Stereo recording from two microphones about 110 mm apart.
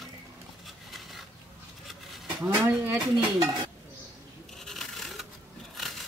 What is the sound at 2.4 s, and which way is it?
Dishes, 25° right (ahead or behind).